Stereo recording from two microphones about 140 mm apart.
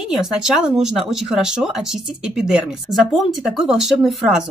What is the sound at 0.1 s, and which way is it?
Speech, 5° right (ahead or behind).